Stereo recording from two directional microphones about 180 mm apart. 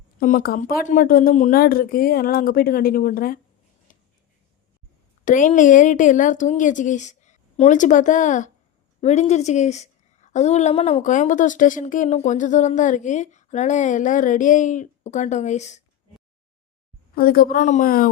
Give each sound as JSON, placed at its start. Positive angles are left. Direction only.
{"t": 0.2, "sound": "speech", "side_deg": 50}
{"t": 3.9, "sound": "a sound", "side_deg": 45}
{"t": 5.2, "sound": "a woman's voice", "side_deg": 45}
{"t": 17.2, "sound": "speech", "side_deg": 55}